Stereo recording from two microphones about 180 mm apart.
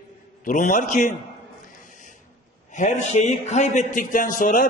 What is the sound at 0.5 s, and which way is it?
Speech, 45° left (ahead or behind).